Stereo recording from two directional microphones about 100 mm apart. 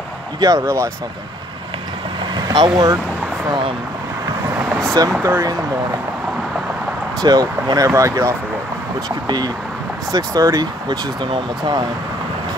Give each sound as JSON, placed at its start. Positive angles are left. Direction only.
{"t": 0.4, "sound": "speech", "side_deg": -35}
{"t": 2.3, "sound": "speech", "side_deg": -45}
{"t": 5.0, "sound": "speech", "side_deg": -40}
{"t": 7.2, "sound": "speech", "side_deg": -40}
{"t": 10.1, "sound": "speech", "side_deg": -35}